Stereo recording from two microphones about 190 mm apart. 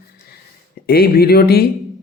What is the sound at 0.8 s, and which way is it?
Speech, 55° left (ahead or behind).